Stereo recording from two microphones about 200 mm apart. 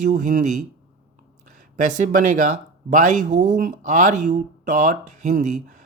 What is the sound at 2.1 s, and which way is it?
Speech, 40° right (ahead or behind).